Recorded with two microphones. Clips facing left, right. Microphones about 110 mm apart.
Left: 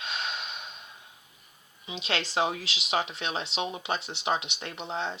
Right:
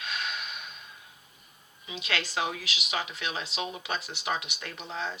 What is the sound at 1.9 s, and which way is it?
Speech, 25° left (ahead or behind).